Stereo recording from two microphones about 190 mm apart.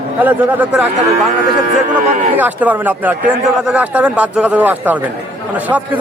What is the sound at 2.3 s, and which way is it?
Speech, 10° right (ahead or behind).